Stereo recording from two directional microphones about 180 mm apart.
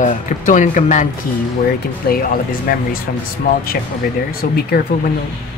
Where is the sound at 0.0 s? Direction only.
45° left (ahead or behind).